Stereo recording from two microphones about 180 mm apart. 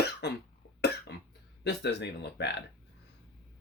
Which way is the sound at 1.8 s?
70° left (ahead or behind).